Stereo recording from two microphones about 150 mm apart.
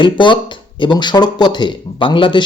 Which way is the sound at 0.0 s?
35° left (ahead or behind).